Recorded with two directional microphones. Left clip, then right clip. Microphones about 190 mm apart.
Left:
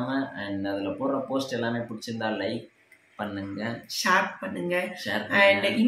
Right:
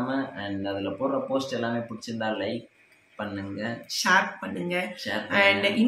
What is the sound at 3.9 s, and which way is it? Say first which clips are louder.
Speech: right 1 dB; 10° right (ahead or behind).